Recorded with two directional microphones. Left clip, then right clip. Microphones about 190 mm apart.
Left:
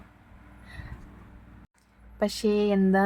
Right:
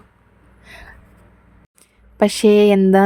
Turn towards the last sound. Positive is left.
turn(degrees=-40)  # may be behind; listen again after turning